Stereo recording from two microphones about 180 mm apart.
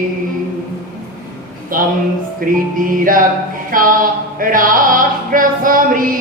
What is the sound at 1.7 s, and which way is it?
Music, 50° right (ahead or behind).